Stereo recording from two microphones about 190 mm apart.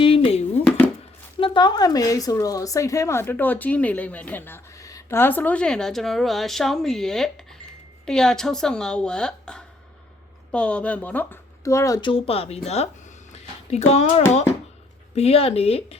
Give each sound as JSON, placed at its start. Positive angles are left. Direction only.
{"t": 0.0, "sound": "a sound", "side_deg": 30}
{"t": 1.4, "sound": "speech", "side_deg": 25}
{"t": 15.1, "sound": "speech", "side_deg": 30}